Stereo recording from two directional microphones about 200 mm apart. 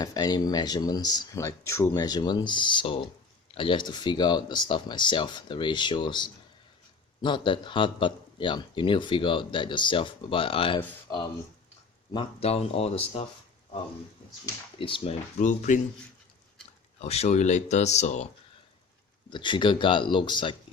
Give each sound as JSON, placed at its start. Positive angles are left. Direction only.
{"t": 0.0, "sound": "a man's voice", "side_deg": 20}
{"t": 14.4, "sound": "a man's voice", "side_deg": 25}
{"t": 15.4, "sound": "speech", "side_deg": 40}
{"t": 17.0, "sound": "speech", "side_deg": 30}
{"t": 19.3, "sound": "a man's voice", "side_deg": 25}